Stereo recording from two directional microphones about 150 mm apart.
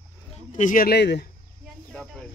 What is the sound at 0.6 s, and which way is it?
Speech, 65° left (ahead or behind).